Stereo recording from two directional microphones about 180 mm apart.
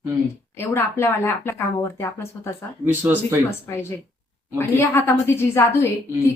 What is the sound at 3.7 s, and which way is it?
A woman's voice, 15° left (ahead or behind).